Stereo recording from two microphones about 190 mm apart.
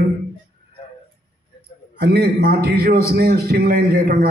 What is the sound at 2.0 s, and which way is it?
A man's voice, 55° right (ahead or behind).